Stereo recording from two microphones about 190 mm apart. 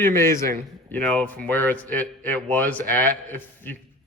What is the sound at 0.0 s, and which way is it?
A man's voice, 15° left (ahead or behind).